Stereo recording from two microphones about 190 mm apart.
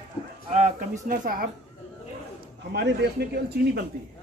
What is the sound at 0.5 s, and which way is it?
Speech, 35° right (ahead or behind).